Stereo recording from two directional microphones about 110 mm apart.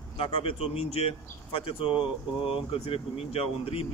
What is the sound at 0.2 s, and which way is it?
Speech, 60° left (ahead or behind).